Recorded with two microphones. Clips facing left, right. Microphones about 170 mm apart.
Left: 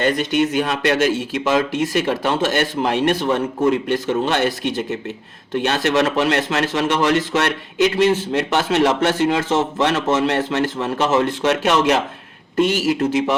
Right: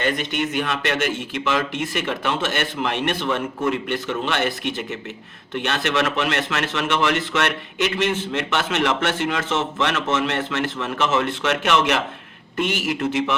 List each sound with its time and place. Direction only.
0.0 s speech: 40° left (ahead or behind)